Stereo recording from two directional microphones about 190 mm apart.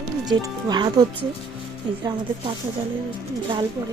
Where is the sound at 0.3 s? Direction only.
20° right (ahead or behind).